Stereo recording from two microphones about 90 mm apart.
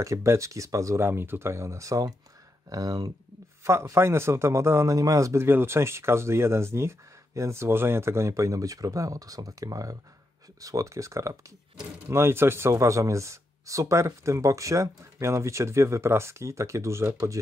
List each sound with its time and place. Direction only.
0.0 s a man's voice: 35° right (ahead or behind)
3.6 s a man's voice: 30° right (ahead or behind)